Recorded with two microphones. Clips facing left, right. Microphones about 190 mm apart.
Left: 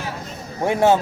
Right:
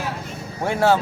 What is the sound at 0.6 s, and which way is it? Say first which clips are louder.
Speech: left 2 dB; 20° left (ahead or behind).